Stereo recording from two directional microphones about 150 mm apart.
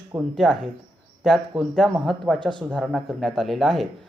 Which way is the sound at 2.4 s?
30° right (ahead or behind).